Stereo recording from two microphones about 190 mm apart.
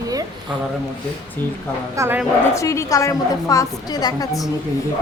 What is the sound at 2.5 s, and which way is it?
A woman's voice, 15° left (ahead or behind).